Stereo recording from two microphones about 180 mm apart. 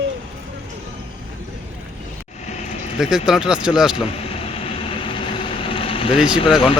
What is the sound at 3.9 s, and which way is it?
Vehicle, 30° left (ahead or behind).